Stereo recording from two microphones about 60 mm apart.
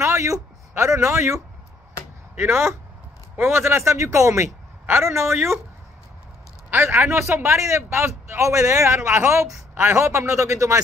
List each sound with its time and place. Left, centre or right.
0.0 s a man's voice: right
4.8 s a man's voice: right
6.7 s a man's voice: right